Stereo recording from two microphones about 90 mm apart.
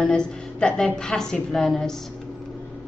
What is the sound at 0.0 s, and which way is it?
A woman's voice, 10° left (ahead or behind).